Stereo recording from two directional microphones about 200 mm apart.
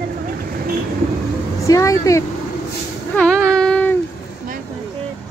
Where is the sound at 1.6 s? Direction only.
15° left (ahead or behind).